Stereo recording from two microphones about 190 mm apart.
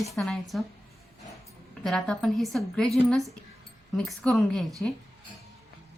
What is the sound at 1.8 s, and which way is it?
Speech, centre (ahead or behind).